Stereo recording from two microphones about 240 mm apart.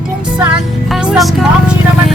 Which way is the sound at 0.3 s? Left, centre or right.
Centre.